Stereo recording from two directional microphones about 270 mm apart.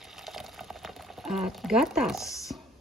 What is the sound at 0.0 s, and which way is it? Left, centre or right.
Boiling, centre.